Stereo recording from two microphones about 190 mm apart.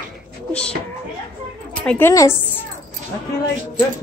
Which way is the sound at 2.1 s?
15° left (ahead or behind).